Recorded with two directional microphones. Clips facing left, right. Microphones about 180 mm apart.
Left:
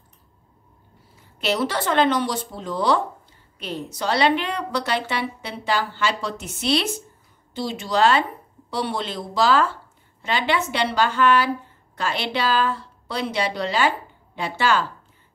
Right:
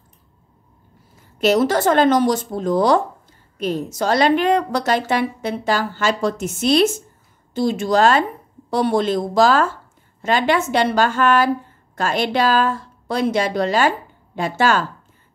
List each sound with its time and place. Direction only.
1.4 s a woman's voice: 45° right (ahead or behind)